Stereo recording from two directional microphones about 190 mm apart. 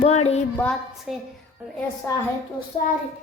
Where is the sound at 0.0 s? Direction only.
35° left (ahead or behind).